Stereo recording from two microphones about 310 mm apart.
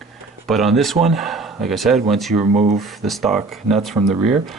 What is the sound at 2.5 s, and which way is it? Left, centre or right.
Speech, right.